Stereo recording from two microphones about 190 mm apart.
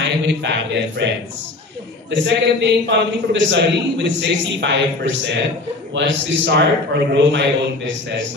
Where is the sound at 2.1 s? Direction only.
65° right (ahead or behind).